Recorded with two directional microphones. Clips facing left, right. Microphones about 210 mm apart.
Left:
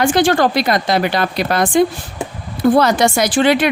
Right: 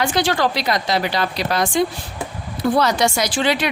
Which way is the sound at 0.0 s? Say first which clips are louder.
Left 6 dB; 50° left (ahead or behind).